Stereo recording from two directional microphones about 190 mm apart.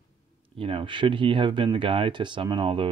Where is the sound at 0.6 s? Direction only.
30° right (ahead or behind).